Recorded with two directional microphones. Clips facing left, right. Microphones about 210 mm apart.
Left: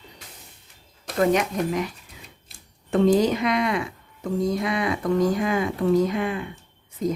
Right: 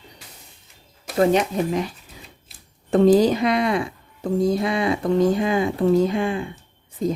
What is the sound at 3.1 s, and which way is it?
Speech, 35° right (ahead or behind).